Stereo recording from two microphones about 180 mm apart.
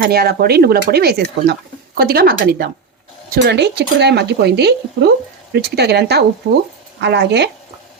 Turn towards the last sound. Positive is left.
turn(degrees=-70)  # may be behind; listen again after turning